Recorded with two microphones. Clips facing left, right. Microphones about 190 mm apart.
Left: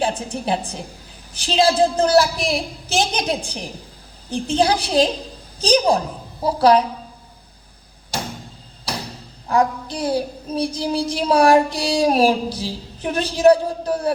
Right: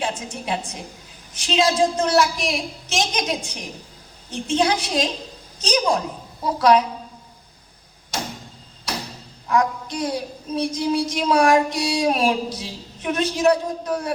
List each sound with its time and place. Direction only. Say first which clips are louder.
0.0 s a woman's voice: left 5 dB; 30° left (ahead or behind)
9.5 s a woman's voice: left 2 dB; 30° left (ahead or behind)